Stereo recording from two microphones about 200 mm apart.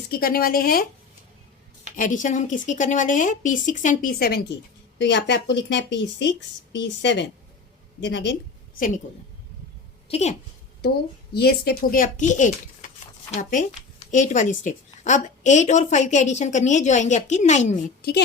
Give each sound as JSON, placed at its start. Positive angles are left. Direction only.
{"t": 0.1, "sound": "speech", "side_deg": 50}
{"t": 2.0, "sound": "a woman's voice", "side_deg": 40}
{"t": 4.9, "sound": "a woman's voice", "side_deg": 60}
{"t": 10.1, "sound": "a woman's voice", "side_deg": 35}
{"t": 11.3, "sound": "a woman's voice", "side_deg": 50}